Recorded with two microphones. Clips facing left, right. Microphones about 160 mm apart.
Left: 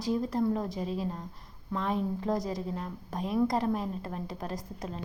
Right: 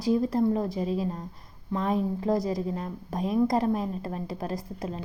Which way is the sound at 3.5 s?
40° right (ahead or behind).